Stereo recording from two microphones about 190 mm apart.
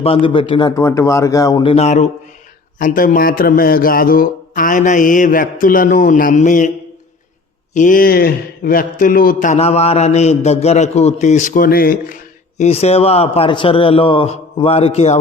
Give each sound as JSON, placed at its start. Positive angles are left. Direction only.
{"t": 0.0, "sound": "a man's voice", "side_deg": 30}
{"t": 0.8, "sound": "speech", "side_deg": 15}
{"t": 1.7, "sound": "a man's voice", "side_deg": 35}
{"t": 7.7, "sound": "a man's voice", "side_deg": 45}